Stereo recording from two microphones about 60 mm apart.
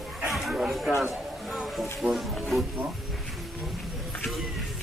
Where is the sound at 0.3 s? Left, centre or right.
Centre.